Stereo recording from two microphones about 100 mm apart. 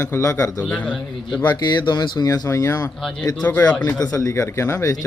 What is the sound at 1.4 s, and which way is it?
Speech, 45° left (ahead or behind).